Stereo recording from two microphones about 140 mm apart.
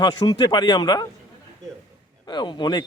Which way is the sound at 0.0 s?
30° left (ahead or behind).